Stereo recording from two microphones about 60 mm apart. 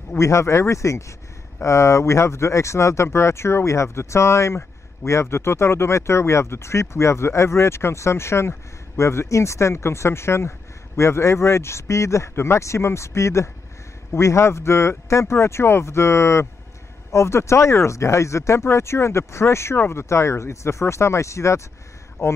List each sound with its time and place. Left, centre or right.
0.2 s speech: left